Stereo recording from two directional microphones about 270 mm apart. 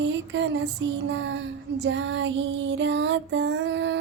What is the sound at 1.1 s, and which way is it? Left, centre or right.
Child singing, right.